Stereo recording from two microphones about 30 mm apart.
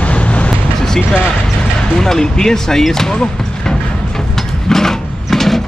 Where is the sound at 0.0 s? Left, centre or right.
Left.